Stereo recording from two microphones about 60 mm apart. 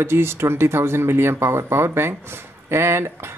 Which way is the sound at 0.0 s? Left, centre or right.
Right.